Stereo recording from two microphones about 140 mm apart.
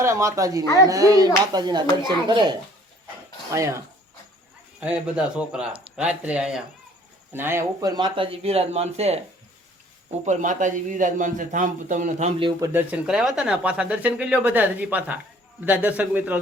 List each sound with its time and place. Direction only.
0.0 s a woman's voice: 20° right (ahead or behind)
0.6 s speech: 25° left (ahead or behind)
0.9 s speech: 25° right (ahead or behind)
3.5 s a woman's voice: 20° right (ahead or behind)
4.8 s speech: 10° right (ahead or behind)
7.8 s speech: 30° right (ahead or behind); by 9.2 s 50° right (ahead or behind)
10.2 s a man's voice: 65° right (ahead or behind)
12.5 s a woman's voice: 25° right (ahead or behind)
12.9 s speech: 5° right (ahead or behind)